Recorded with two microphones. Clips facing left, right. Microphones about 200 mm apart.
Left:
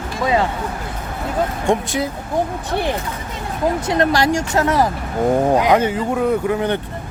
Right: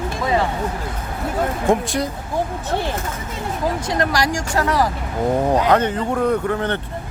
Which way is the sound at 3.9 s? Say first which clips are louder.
Left 5 dB; 25° left (ahead or behind).